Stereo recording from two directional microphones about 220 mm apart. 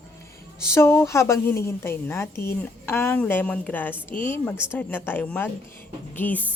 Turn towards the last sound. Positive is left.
turn(degrees=5)  # may be behind; listen again after turning